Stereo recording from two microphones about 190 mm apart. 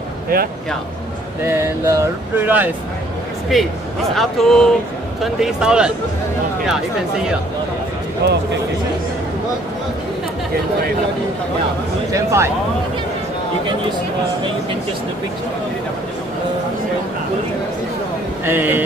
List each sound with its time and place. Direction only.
1.4 s speech: 15° right (ahead or behind)
8.2 s speech: 60° right (ahead or behind)
12.1 s speech: 15° right (ahead or behind)
18.4 s speech: 10° right (ahead or behind)